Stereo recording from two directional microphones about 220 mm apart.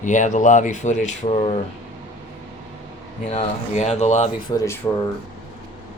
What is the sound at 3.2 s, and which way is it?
Speech, 30° left (ahead or behind).